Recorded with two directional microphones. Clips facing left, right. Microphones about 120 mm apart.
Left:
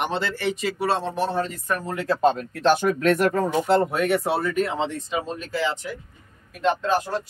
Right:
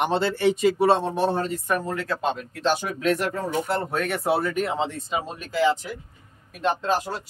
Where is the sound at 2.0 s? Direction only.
40° left (ahead or behind).